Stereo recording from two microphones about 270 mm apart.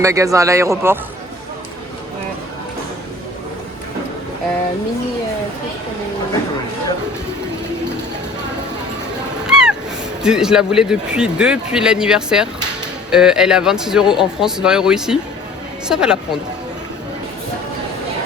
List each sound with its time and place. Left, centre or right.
0.0 s a man's voice: centre
9.5 s a sound: centre
10.2 s a man's voice: centre